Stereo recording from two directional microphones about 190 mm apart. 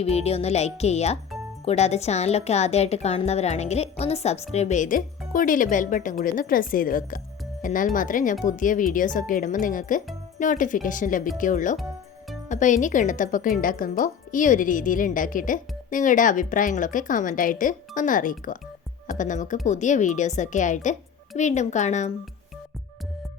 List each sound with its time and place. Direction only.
0.0 s a woman's voice: 35° left (ahead or behind)